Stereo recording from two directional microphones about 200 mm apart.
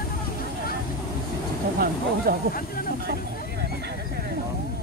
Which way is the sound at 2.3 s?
50° right (ahead or behind).